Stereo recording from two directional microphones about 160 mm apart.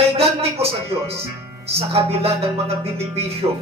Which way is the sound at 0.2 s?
40° right (ahead or behind).